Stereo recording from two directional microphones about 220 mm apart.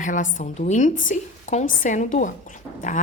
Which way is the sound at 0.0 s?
35° left (ahead or behind).